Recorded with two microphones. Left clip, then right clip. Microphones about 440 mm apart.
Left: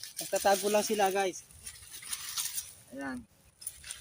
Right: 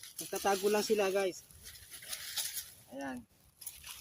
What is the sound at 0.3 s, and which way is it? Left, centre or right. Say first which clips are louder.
Speech: left 4 dB; right.